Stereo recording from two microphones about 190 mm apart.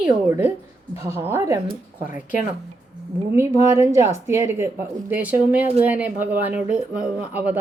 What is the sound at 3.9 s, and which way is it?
Speech, 15° right (ahead or behind).